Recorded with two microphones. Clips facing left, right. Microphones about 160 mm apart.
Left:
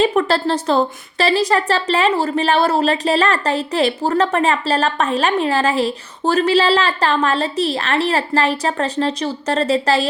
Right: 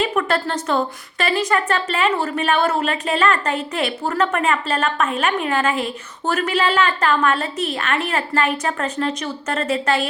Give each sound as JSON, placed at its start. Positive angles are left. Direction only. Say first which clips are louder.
{"t": 0.0, "sound": "a woman's voice", "louder": "left 4 dB", "side_deg": 30}